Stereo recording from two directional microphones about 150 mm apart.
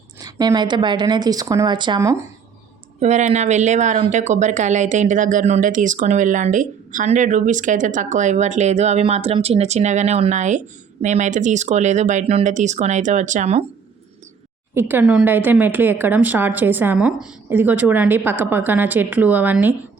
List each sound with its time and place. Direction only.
0.2 s a woman's voice: 25° right (ahead or behind)
2.0 s a woman's voice: 20° right (ahead or behind)
3.0 s speech: 50° right (ahead or behind)
14.8 s a woman's voice: 15° right (ahead or behind)